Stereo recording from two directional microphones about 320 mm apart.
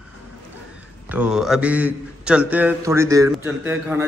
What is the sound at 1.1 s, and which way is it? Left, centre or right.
A man's voice, centre.